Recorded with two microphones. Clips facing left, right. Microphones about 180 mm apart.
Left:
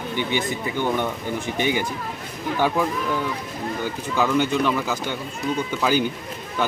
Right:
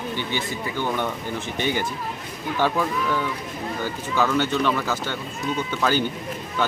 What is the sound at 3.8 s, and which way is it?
Speech, 15° left (ahead or behind).